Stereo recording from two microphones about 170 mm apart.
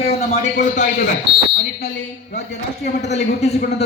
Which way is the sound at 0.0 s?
40° left (ahead or behind).